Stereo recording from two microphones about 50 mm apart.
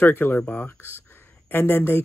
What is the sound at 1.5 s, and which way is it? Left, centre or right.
Speech, left.